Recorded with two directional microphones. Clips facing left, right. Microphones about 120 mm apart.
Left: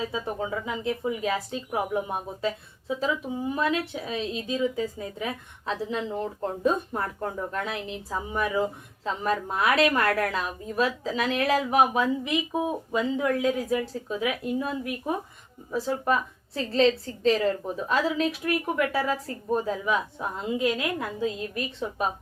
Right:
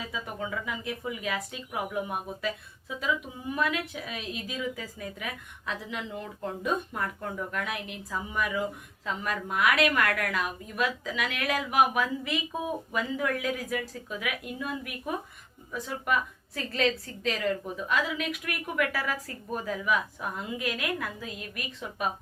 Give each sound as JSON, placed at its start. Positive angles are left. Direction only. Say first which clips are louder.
{"t": 0.0, "sound": "a woman's voice", "louder": "left 6 dB", "side_deg": 30}